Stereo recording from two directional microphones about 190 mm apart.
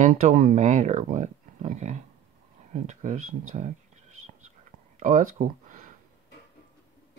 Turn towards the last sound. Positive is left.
turn(degrees=-45)  # may be behind; listen again after turning